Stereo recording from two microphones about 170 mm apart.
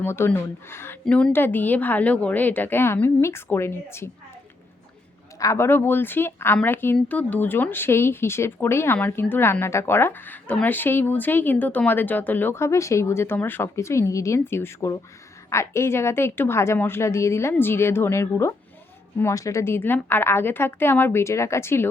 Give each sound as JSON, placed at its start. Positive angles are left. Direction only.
{"t": 0.0, "sound": "speech", "side_deg": 15}
{"t": 5.4, "sound": "speech", "side_deg": 15}